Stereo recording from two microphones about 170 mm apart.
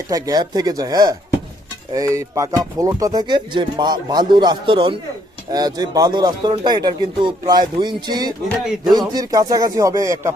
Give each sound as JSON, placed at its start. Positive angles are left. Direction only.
{"t": 0.1, "sound": "speech", "side_deg": -20}